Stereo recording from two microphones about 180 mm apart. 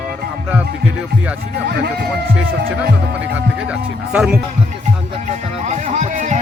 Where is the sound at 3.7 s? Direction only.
5° right (ahead or behind).